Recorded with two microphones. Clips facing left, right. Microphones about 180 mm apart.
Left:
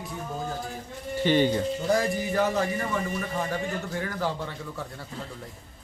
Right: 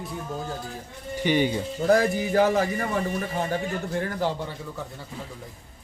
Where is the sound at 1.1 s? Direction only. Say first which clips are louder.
Left 1 dB; 15° right (ahead or behind).